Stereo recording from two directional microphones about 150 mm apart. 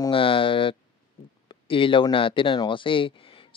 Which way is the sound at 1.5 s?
35° left (ahead or behind).